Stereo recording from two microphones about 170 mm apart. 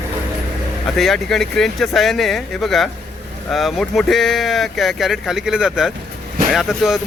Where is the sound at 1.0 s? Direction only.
Centre (ahead or behind).